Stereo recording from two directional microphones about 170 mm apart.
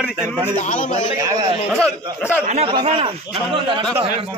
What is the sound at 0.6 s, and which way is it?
Speech, 50° left (ahead or behind).